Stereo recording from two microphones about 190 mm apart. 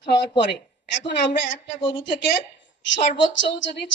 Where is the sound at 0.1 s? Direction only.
65° left (ahead or behind).